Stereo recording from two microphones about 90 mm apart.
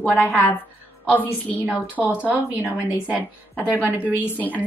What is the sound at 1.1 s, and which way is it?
Speech, 20° left (ahead or behind).